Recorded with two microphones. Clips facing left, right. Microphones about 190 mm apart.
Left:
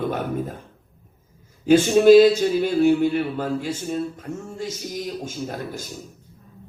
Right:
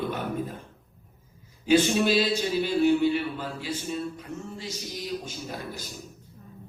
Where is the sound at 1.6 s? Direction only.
45° left (ahead or behind).